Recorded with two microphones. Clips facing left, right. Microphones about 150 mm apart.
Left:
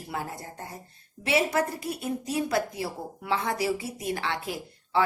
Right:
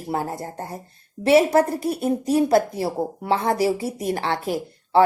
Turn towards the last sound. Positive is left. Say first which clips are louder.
# right 8 dB
turn(degrees=-35)  # may be behind; listen again after turning